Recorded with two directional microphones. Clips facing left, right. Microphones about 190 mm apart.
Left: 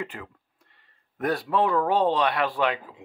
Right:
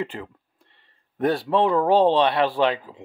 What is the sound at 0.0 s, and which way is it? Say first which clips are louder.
Speech: right 5 dB; 30° right (ahead or behind).